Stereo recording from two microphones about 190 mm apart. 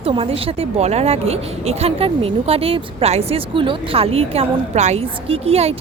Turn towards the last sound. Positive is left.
turn(degrees=-35)  # may be behind; listen again after turning